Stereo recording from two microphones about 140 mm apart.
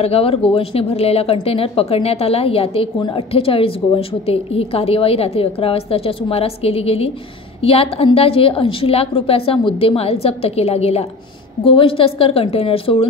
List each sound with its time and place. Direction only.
0.0 s a woman's voice: 45° left (ahead or behind)